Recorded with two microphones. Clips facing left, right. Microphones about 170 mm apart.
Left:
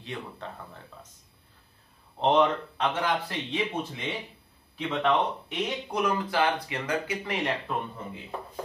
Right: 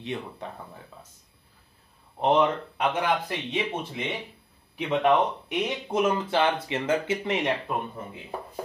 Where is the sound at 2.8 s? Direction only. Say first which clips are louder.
Right 2 dB; 15° right (ahead or behind).